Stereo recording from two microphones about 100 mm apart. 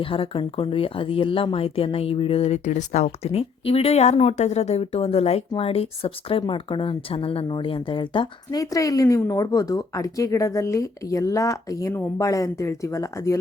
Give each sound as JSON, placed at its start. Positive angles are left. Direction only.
{"t": 0.0, "sound": "speech", "side_deg": 65}
{"t": 6.5, "sound": "speech", "side_deg": 60}
{"t": 8.4, "sound": "a woman's voice", "side_deg": 35}